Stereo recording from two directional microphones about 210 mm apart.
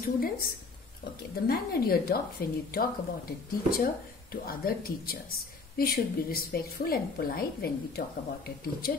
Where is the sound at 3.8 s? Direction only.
45° left (ahead or behind).